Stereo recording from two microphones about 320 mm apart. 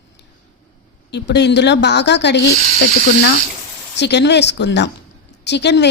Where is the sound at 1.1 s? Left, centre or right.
Left.